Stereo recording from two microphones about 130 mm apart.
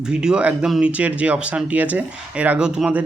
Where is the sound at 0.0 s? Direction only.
5° right (ahead or behind).